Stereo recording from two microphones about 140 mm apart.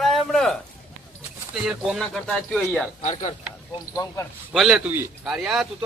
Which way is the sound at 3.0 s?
55° left (ahead or behind).